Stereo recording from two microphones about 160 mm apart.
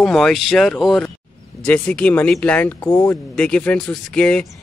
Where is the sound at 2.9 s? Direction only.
20° left (ahead or behind).